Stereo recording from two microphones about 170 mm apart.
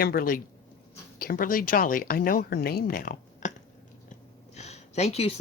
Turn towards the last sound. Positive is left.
turn(degrees=40)  # may be behind; listen again after turning